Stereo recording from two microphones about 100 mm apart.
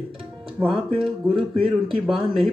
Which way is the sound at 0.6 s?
15° right (ahead or behind).